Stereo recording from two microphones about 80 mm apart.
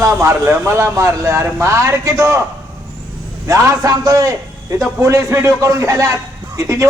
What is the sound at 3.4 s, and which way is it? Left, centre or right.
A man's voice, right.